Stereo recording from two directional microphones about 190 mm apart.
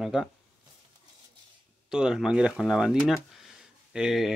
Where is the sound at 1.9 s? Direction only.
5° right (ahead or behind).